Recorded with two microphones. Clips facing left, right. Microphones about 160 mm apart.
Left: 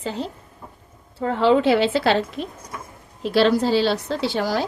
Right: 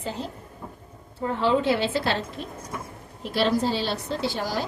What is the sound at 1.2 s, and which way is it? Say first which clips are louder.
A woman's voice: left 5 dB; 85° left.